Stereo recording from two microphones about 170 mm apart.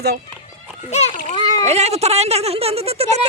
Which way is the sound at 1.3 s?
20° left (ahead or behind).